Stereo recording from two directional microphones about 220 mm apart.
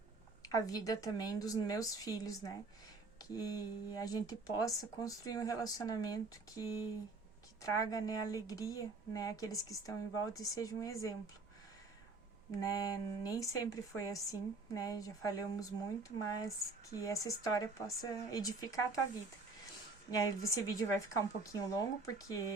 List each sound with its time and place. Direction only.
0.4 s speech: 15° left (ahead or behind)
7.6 s speech: 15° left (ahead or behind)
12.5 s speech: 15° left (ahead or behind)
20.1 s speech: 15° left (ahead or behind)